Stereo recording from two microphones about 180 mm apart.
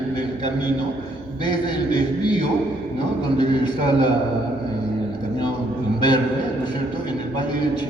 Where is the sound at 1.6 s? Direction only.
25° left (ahead or behind).